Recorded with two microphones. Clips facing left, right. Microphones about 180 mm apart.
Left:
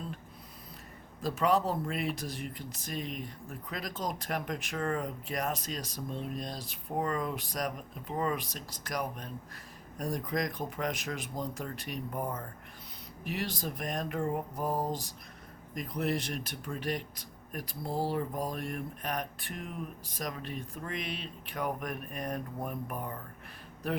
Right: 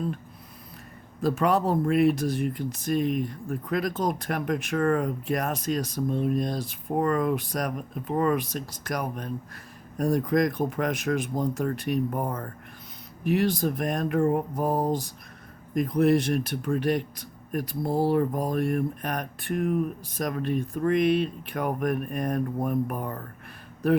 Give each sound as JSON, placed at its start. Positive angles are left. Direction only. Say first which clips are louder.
{"t": 1.2, "sound": "speech", "louder": "right 5 dB", "side_deg": -55}